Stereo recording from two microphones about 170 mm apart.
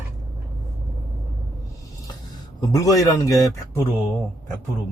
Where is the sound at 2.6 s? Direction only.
20° left (ahead or behind).